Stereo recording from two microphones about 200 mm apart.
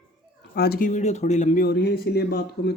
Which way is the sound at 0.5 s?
50° left (ahead or behind).